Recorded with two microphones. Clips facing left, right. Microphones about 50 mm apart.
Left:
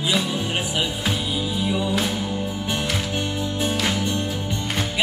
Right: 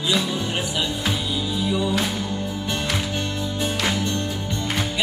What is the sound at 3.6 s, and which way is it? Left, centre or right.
Music, centre.